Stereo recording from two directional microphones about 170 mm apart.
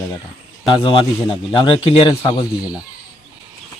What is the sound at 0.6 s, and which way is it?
A man's voice, 30° left (ahead or behind).